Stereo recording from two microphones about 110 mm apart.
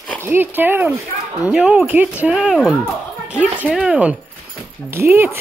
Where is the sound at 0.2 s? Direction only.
20° right (ahead or behind).